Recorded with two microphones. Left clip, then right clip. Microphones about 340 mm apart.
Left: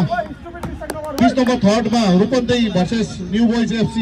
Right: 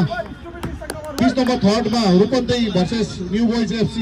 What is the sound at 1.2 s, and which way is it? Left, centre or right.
A man's voice, left.